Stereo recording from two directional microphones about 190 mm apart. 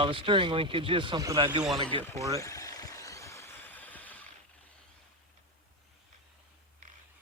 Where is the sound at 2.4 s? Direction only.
15° left (ahead or behind).